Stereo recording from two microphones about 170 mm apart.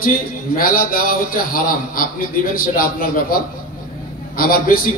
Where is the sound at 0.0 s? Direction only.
55° left (ahead or behind).